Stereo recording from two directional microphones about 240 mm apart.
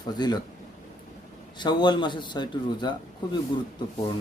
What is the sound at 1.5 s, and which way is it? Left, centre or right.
A man's voice, centre.